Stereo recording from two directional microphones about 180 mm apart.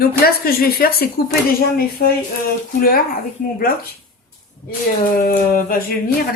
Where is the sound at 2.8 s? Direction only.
55° left (ahead or behind).